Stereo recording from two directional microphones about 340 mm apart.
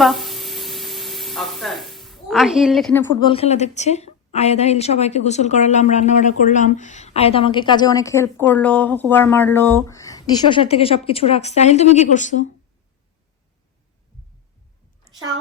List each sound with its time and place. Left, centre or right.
0.0 s speech: centre; by 12.5 s left